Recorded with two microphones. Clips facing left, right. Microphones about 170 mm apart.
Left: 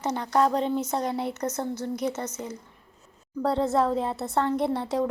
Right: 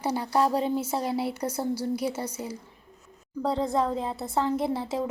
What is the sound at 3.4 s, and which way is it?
A woman's voice, centre (ahead or behind).